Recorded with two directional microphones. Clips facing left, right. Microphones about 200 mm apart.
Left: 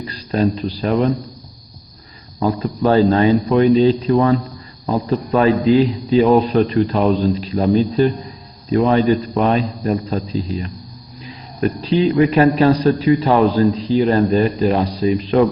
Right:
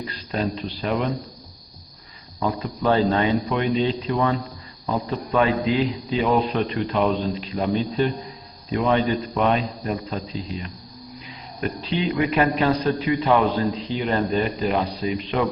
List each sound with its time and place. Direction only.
0.1 s a man's voice: 40° left (ahead or behind)
2.4 s a man's voice: 40° left (ahead or behind)
11.8 s a man's voice: 35° left (ahead or behind)